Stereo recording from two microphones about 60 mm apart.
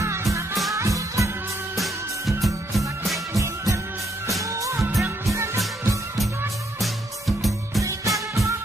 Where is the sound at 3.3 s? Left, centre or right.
Right.